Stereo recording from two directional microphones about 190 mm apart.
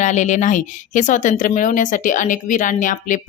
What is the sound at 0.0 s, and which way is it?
Speech, 40° left (ahead or behind).